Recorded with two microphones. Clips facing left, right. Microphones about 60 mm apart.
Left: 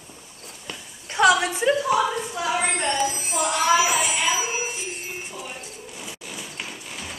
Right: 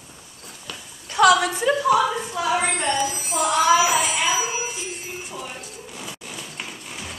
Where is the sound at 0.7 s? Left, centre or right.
Left.